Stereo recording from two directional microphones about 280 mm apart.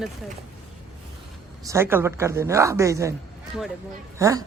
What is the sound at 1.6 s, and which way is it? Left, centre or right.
A woman's voice, centre.